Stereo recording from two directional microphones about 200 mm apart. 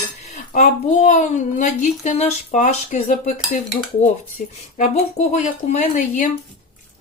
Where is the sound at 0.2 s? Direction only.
35° left (ahead or behind).